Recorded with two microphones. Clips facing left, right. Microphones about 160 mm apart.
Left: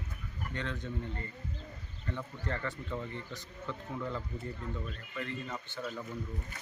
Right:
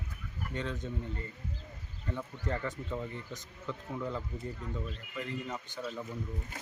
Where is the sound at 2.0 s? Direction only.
10° right (ahead or behind).